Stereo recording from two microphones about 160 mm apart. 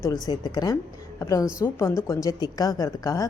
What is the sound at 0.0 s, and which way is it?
A woman's voice, 25° left (ahead or behind).